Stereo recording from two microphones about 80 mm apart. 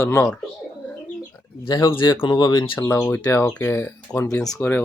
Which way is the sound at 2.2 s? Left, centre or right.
Left.